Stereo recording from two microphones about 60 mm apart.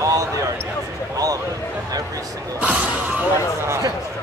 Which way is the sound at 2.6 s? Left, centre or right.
Right.